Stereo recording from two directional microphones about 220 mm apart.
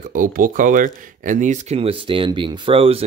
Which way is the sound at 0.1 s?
40° right (ahead or behind).